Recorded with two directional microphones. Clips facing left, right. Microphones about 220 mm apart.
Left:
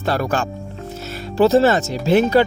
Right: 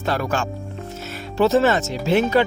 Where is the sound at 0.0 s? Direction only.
35° left (ahead or behind).